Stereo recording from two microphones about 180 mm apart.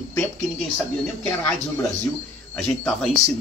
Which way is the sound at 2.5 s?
5° left (ahead or behind).